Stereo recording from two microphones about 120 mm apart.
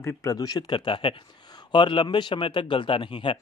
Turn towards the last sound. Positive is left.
turn(degrees=45)  # may be behind; listen again after turning